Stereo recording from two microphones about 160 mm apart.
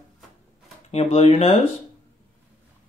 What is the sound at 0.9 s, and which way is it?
Speech, 40° left (ahead or behind).